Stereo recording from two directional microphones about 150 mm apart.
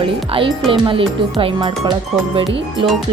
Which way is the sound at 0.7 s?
35° right (ahead or behind).